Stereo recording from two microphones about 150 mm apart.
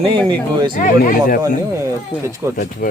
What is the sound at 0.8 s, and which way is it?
Speech, 70° left (ahead or behind).